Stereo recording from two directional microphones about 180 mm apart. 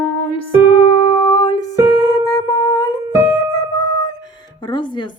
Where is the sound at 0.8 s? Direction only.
25° left (ahead or behind).